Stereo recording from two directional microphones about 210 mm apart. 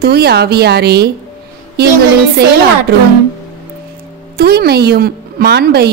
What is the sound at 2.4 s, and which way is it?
Speech, 50° right (ahead or behind).